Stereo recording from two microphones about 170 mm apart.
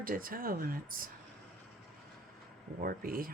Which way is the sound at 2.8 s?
60° right (ahead or behind).